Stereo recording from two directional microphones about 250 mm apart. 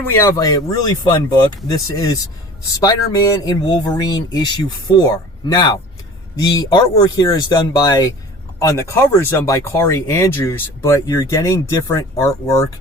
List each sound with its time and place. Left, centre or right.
0.2 s speech: centre